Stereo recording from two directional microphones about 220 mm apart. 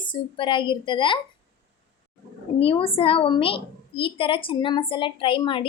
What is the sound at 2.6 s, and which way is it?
A woman's voice, 25° left (ahead or behind).